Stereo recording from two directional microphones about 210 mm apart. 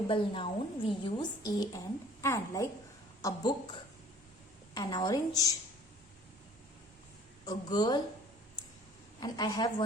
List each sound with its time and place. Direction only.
0.1 s a woman's voice: 25° left (ahead or behind)
7.4 s a woman's voice: 20° left (ahead or behind)
9.2 s a woman's voice: 20° left (ahead or behind)